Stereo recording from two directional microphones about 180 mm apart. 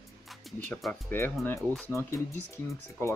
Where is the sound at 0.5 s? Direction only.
Centre (ahead or behind).